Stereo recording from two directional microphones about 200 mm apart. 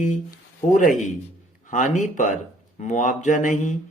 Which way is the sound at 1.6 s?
40° left (ahead or behind).